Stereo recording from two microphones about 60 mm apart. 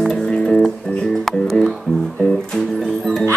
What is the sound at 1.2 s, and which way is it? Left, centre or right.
Speech, centre.